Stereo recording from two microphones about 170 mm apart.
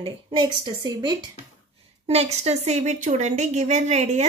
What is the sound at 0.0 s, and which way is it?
A woman's voice, 25° right (ahead or behind).